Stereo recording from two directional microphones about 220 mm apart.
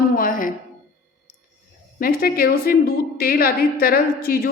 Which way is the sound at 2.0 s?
40° left (ahead or behind).